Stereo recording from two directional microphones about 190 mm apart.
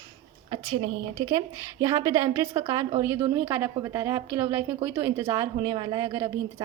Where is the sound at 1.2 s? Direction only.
20° right (ahead or behind).